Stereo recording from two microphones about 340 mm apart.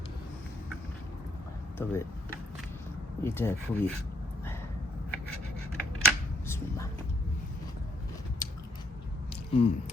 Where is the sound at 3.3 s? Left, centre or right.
Centre.